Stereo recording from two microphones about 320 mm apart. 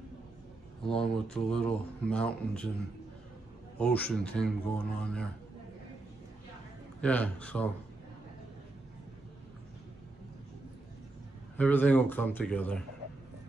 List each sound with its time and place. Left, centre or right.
0.8 s speech: centre
3.7 s speech: centre
7.0 s speech: centre
11.5 s speech: centre